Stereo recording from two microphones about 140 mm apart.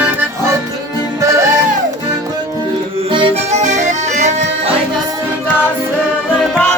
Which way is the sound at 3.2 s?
50° right (ahead or behind).